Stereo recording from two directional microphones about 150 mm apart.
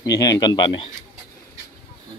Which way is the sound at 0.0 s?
25° left (ahead or behind).